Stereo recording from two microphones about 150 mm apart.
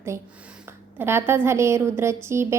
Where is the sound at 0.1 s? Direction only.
15° right (ahead or behind).